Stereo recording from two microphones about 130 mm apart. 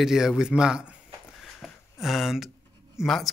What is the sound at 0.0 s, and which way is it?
Speech, 5° right (ahead or behind).